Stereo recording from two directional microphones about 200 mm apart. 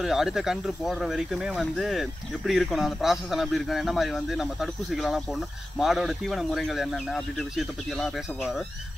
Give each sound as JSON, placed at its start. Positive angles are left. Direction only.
{"t": 0.0, "sound": "speech", "side_deg": 0}